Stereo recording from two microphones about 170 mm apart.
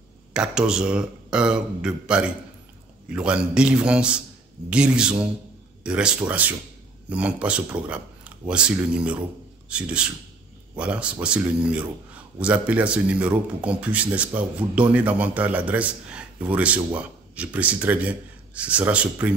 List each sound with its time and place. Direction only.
0.3 s a man's voice: 5° right (ahead or behind)